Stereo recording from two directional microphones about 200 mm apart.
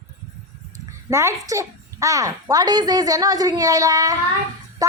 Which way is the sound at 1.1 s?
15° right (ahead or behind).